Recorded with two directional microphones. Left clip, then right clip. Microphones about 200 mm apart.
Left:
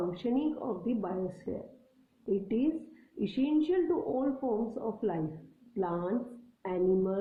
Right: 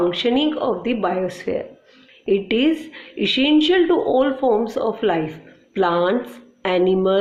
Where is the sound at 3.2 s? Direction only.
15° right (ahead or behind).